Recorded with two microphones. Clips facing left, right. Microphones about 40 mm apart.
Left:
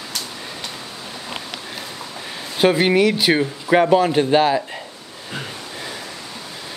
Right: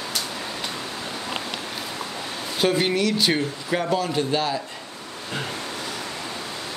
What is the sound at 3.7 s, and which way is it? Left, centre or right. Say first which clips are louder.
Speech: left 10 dB; left.